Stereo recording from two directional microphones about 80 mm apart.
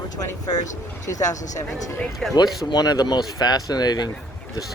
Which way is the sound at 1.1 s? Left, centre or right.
Left.